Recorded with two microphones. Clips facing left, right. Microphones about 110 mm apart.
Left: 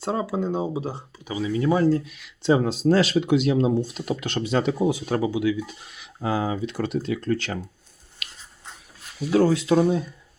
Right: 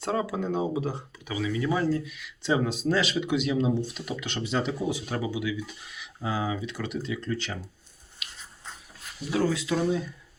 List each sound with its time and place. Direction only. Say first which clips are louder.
0.0 s speech: left 3 dB; 30° left (ahead or behind); by 5.7 s 45° left (ahead or behind)
6.2 s speech: left 5 dB; 55° left (ahead or behind)
6.7 s speech: left 7 dB; 35° left (ahead or behind)
7.0 s speech: left 6 dB; 55° left (ahead or behind)
9.3 s speech: left 7 dB; 45° left (ahead or behind)